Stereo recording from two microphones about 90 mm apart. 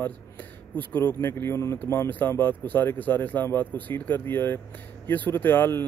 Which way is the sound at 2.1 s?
20° left (ahead or behind).